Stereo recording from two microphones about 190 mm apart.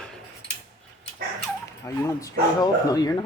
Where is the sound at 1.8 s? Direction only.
15° left (ahead or behind).